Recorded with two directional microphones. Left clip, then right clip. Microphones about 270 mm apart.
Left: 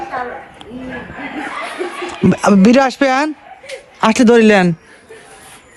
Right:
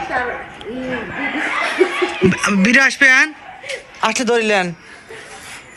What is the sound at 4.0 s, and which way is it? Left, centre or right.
Speech, left.